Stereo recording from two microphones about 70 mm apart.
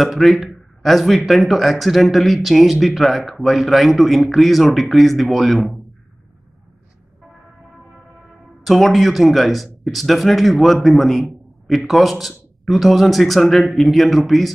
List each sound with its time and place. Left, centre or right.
0.0 s speech: centre
8.6 s speech: centre